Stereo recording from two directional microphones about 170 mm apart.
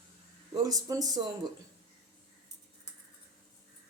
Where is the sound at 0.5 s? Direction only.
20° right (ahead or behind).